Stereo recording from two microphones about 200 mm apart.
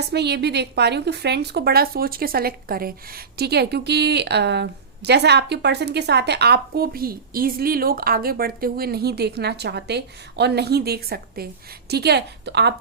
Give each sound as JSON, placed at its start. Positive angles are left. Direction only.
{"t": 0.1, "sound": "a woman's voice", "side_deg": -55}